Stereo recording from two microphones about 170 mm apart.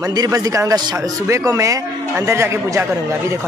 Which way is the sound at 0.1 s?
20° right (ahead or behind).